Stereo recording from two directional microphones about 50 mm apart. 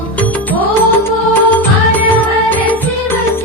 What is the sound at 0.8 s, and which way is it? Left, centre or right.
Music, left.